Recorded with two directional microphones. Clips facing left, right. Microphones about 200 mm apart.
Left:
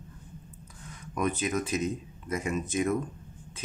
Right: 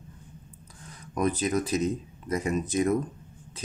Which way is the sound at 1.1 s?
35° right (ahead or behind).